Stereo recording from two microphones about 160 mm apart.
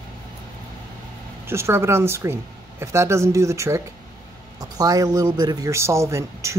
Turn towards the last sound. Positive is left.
turn(degrees=-20)  # may be behind; listen again after turning